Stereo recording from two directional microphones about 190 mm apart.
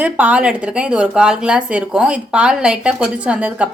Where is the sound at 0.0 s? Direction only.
5° right (ahead or behind).